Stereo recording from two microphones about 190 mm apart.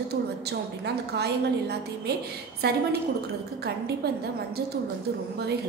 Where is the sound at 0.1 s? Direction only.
60° right (ahead or behind).